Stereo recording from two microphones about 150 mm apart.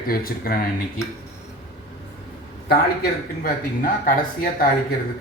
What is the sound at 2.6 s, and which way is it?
Speech, 90° left.